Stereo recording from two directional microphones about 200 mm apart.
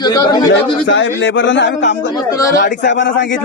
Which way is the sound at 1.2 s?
70° left (ahead or behind).